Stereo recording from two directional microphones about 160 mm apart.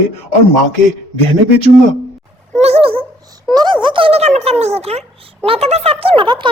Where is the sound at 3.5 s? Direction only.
30° right (ahead or behind).